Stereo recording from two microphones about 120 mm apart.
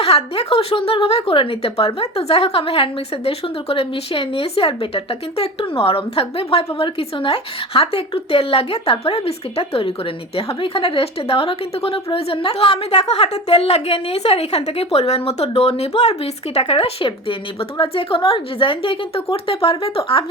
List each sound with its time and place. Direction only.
0.0 s a woman's voice: 55° left (ahead or behind)